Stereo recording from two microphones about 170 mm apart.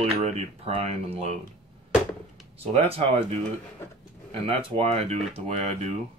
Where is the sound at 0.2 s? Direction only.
40° right (ahead or behind).